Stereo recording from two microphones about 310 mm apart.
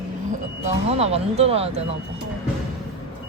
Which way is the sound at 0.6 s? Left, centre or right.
Centre.